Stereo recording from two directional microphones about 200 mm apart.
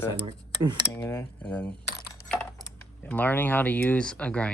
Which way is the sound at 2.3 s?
5° left (ahead or behind).